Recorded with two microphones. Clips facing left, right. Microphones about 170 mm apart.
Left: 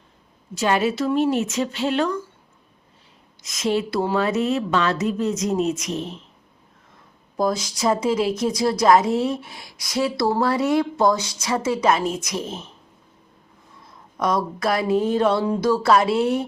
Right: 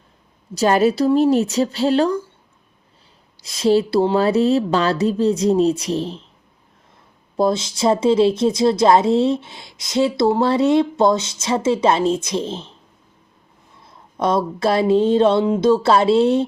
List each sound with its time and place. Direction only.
0.5 s speech: 40° right (ahead or behind)
3.4 s speech: 35° right (ahead or behind)
7.3 s a woman's voice: 25° right (ahead or behind)
14.2 s a woman's voice: 25° right (ahead or behind)